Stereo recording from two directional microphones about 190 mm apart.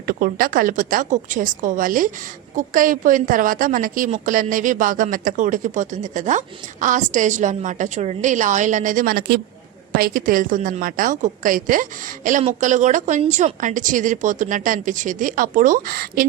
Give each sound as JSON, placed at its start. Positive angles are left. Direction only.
{"t": 0.0, "sound": "a woman's voice", "side_deg": -50}